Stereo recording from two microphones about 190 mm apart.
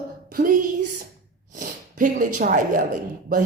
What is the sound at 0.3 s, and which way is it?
A woman's voice, 45° right (ahead or behind).